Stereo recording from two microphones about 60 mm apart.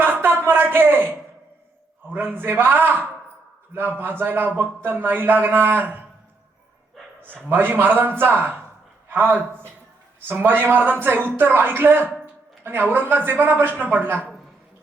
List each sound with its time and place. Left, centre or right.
0.0 s a sound: right
2.0 s a man's voice: right
7.4 s a man's voice: right